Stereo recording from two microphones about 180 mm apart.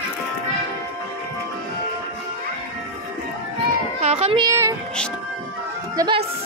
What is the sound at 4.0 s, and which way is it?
Speech, 35° right (ahead or behind).